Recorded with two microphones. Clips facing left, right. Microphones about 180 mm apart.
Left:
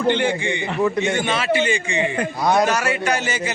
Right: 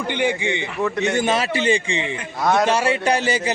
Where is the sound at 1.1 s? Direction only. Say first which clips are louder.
Even; 40° right (ahead or behind).